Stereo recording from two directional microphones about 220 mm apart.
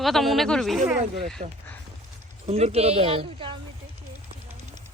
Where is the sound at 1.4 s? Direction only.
30° right (ahead or behind).